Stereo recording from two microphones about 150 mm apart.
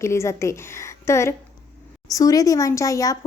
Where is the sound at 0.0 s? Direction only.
20° left (ahead or behind).